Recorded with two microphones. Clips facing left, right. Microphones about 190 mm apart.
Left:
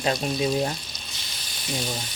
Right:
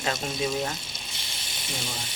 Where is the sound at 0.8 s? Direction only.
25° right (ahead or behind).